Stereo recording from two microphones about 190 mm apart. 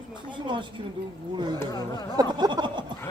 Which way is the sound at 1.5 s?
20° left (ahead or behind).